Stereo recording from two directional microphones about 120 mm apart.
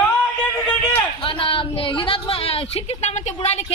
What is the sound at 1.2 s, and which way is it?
A woman's voice, 45° left (ahead or behind).